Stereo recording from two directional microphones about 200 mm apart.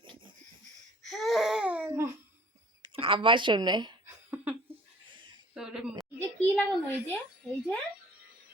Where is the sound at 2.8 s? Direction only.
25° right (ahead or behind).